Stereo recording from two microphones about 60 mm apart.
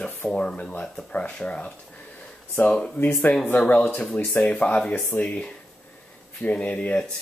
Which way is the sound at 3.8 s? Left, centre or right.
Centre.